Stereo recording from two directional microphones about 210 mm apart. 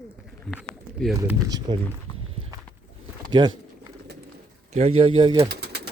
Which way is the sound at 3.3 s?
20° right (ahead or behind).